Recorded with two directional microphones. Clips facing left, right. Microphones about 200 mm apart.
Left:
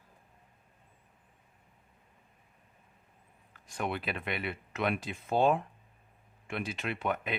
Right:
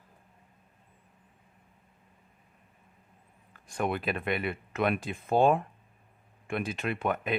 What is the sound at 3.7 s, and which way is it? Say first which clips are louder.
Speech: right 4 dB; 50° right (ahead or behind).